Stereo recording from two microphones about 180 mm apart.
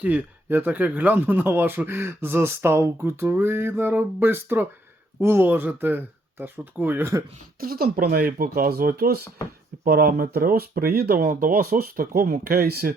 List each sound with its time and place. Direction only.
0.0 s speech: 10° right (ahead or behind)
7.6 s speech: 55° right (ahead or behind)